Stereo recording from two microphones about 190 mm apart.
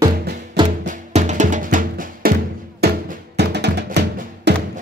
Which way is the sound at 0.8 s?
40° right (ahead or behind).